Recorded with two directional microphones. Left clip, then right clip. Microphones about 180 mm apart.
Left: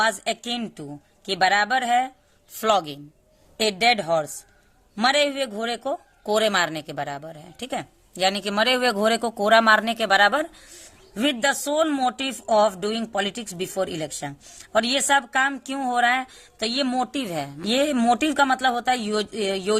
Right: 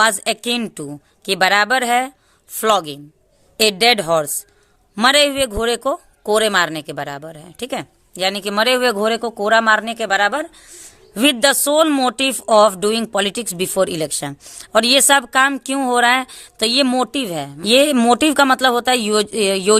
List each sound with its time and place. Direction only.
0.0 s a man's voice: 40° right (ahead or behind); by 10.6 s 15° right (ahead or behind)
11.1 s speech: 45° right (ahead or behind)